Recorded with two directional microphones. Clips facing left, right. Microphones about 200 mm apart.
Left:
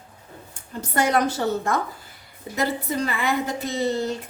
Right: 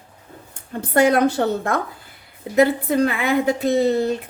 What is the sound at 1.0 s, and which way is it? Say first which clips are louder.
A woman's voice: right 6 dB; 60° right (ahead or behind).